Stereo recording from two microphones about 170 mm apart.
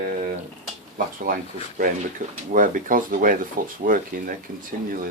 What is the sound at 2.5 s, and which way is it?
Speech, 50° right (ahead or behind).